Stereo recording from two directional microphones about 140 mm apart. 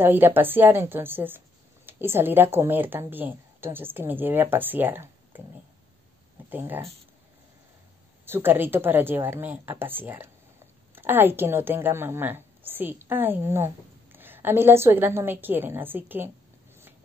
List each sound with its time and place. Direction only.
0.0 s a woman's voice: 15° right (ahead or behind)
6.5 s a woman's voice: 15° right (ahead or behind)
8.3 s a woman's voice: 15° right (ahead or behind)